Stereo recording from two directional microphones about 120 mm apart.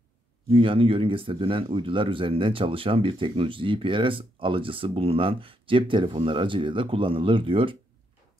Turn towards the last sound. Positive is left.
turn(degrees=-45)  # may be behind; listen again after turning